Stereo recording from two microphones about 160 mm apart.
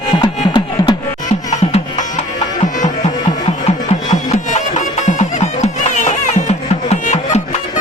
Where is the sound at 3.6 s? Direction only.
45° left (ahead or behind).